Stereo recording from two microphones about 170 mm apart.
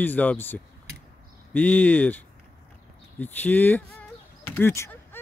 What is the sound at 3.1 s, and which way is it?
Speech, 10° left (ahead or behind).